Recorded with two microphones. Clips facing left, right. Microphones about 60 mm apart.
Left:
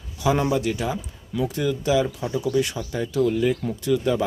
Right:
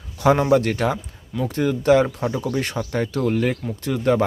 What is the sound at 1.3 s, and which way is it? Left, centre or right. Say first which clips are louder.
Speech: right 2 dB; right.